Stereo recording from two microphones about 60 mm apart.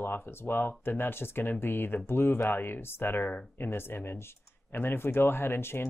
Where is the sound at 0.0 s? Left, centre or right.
Left.